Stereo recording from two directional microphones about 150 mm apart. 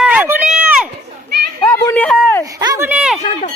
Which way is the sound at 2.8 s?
5° right (ahead or behind).